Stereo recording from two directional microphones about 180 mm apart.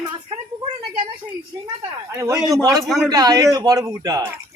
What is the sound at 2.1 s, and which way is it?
A man's voice, 15° right (ahead or behind).